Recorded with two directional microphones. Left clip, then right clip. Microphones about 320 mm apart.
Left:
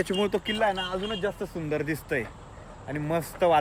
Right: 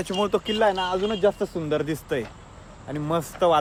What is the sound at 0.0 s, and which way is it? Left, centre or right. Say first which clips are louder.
Speech: right 2 dB; centre.